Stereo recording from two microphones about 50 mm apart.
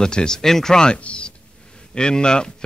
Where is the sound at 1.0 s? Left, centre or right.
Left.